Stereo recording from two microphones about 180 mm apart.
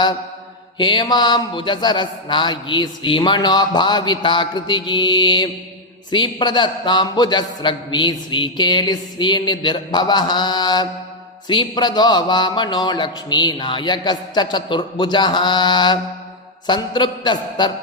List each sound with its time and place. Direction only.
0.8 s a man's voice: 25° left (ahead or behind)